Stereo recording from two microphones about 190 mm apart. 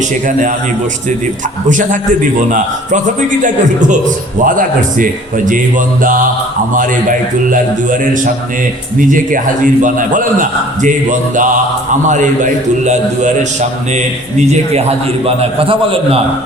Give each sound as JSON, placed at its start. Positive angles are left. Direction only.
{"t": 1.7, "sound": "a man's voice", "side_deg": -45}